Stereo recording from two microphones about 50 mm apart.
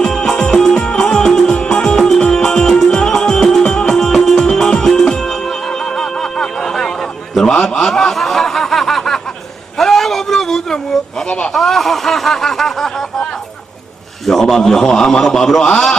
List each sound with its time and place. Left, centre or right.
0.0 s music: centre
7.6 s snicker: centre
9.7 s a sound: centre
11.5 s snicker: centre
14.3 s a man's voice: centre